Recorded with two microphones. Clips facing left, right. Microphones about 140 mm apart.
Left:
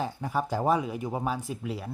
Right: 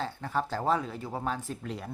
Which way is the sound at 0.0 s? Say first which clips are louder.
Left 2 dB; 15° left (ahead or behind).